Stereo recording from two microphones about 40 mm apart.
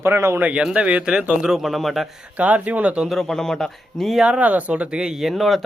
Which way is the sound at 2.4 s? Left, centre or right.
Right.